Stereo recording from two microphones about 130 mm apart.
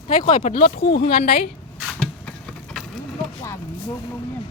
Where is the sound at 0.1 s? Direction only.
90° left.